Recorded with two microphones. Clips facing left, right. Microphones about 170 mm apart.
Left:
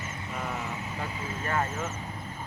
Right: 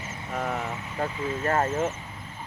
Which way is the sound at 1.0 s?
45° right (ahead or behind).